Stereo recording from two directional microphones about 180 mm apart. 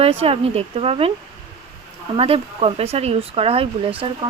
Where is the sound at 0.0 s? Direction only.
30° right (ahead or behind).